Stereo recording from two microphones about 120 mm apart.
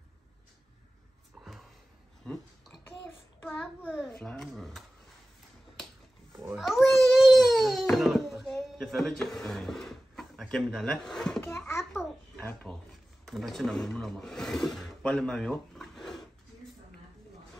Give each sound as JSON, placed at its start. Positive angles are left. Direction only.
{"t": 2.3, "sound": "speech", "side_deg": 5}
{"t": 3.8, "sound": "babbling", "side_deg": -5}
{"t": 4.2, "sound": "speech", "side_deg": 5}
{"t": 6.5, "sound": "babbling", "side_deg": 0}
{"t": 7.9, "sound": "a sound", "side_deg": 0}
{"t": 11.5, "sound": "a sound", "side_deg": 20}
{"t": 11.8, "sound": "babbling", "side_deg": 0}
{"t": 13.2, "sound": "speech", "side_deg": 0}